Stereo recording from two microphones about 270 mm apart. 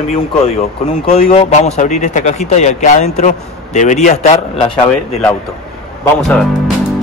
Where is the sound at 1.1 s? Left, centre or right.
Left.